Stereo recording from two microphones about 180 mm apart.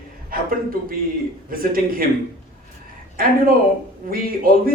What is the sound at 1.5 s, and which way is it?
Speech, 55° right (ahead or behind).